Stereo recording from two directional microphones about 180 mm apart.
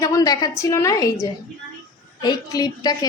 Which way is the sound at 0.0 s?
20° left (ahead or behind).